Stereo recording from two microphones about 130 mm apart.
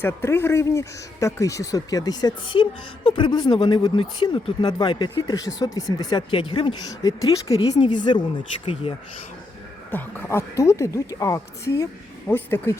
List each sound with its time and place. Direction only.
0.0 s speech: 15° left (ahead or behind); by 6.7 s 45° left (ahead or behind)
7.0 s speech: 25° left (ahead or behind); by 9.0 s 45° left (ahead or behind)
9.9 s speech: 15° left (ahead or behind)